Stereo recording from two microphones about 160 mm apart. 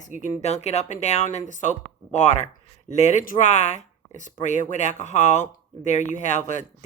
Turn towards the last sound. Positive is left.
turn(degrees=50)  # may be behind; listen again after turning